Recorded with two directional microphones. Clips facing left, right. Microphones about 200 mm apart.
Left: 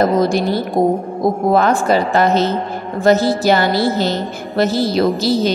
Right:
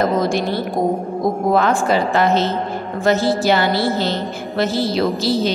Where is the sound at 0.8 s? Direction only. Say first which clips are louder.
Left 4 dB; 30° left (ahead or behind).